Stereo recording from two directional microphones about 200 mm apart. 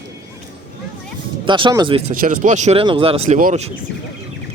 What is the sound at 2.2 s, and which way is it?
Speech, 40° right (ahead or behind).